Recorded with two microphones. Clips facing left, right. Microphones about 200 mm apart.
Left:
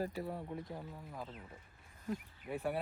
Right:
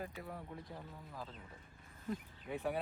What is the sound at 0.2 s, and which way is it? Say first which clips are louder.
Speech: left 6 dB; 30° left (ahead or behind).